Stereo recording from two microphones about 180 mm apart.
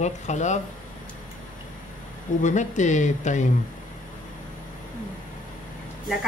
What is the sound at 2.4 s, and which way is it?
Speech, 45° left (ahead or behind).